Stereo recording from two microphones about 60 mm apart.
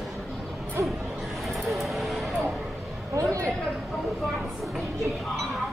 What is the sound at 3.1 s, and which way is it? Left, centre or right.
Speech, right.